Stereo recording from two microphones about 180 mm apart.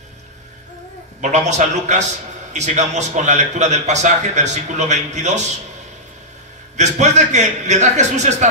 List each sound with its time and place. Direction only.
1.2 s a man's voice: 40° right (ahead or behind)
6.8 s a man's voice: 40° right (ahead or behind)